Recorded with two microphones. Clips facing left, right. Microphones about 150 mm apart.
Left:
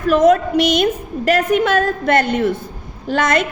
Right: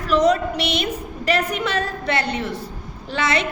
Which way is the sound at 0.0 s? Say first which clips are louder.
Left 5 dB; 50° left (ahead or behind).